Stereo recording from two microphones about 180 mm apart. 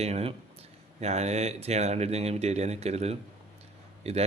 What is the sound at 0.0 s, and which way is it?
Speech, 35° right (ahead or behind).